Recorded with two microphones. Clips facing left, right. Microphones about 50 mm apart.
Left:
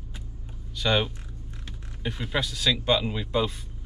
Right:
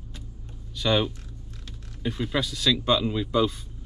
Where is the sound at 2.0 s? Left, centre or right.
Centre.